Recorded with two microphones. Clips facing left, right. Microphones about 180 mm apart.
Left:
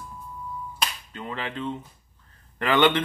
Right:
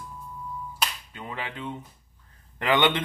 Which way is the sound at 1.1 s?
15° right (ahead or behind).